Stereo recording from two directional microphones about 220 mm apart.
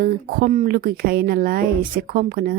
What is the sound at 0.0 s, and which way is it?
A woman's voice, 40° right (ahead or behind).